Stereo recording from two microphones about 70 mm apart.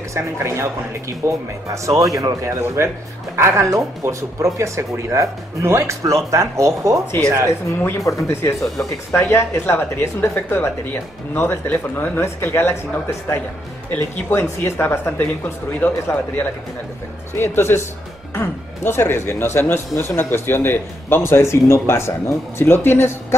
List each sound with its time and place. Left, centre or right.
0.1 s speech: right
7.4 s speech: left
13.8 s a man's voice: left